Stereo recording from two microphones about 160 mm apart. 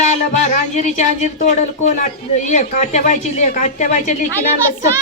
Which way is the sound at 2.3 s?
50° left (ahead or behind).